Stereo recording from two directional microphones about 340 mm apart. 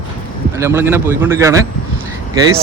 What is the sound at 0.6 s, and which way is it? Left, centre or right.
Speech, centre.